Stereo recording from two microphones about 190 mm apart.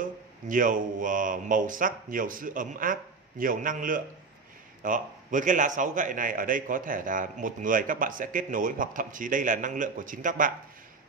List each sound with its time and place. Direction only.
0.0 s a man's voice: 45° right (ahead or behind)